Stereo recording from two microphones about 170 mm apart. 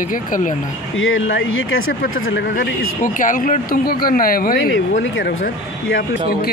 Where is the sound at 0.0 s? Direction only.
50° left (ahead or behind).